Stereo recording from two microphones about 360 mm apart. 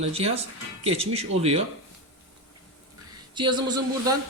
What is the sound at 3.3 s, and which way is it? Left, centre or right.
Speech, centre.